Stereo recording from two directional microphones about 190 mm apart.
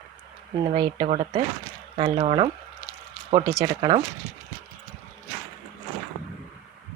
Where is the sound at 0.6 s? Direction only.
25° right (ahead or behind).